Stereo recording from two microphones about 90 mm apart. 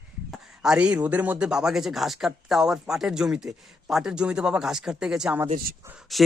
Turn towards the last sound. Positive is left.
turn(degrees=0)  # may be behind; listen again after turning